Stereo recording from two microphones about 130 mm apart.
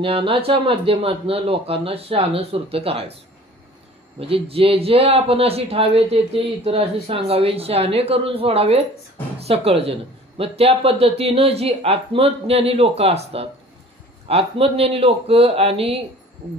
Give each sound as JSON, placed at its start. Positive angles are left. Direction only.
{"t": 0.0, "sound": "speech", "side_deg": -45}
{"t": 4.2, "sound": "speech", "side_deg": -45}